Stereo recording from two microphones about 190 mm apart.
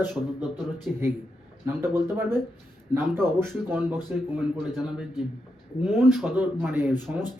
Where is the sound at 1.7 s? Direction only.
15° right (ahead or behind).